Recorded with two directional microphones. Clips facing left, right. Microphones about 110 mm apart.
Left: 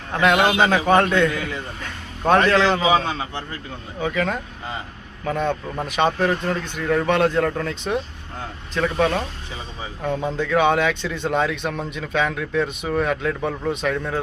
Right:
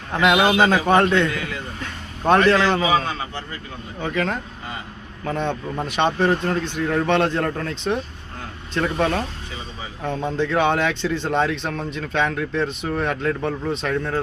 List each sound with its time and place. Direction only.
0.1 s a man's voice: 5° right (ahead or behind)
2.8 s a man's voice: 20° left (ahead or behind)
4.0 s a man's voice: centre (ahead or behind)
11.7 s speech: 15° left (ahead or behind)
11.9 s a man's voice: 5° left (ahead or behind)